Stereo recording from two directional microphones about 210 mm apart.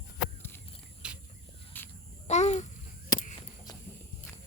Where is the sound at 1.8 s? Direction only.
10° left (ahead or behind).